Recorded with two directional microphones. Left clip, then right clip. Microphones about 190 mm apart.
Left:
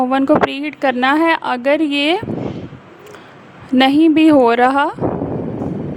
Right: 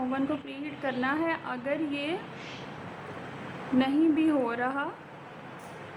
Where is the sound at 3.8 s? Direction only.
55° left (ahead or behind).